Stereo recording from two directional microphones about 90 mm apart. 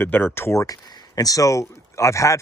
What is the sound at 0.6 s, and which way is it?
Speech, 45° left (ahead or behind).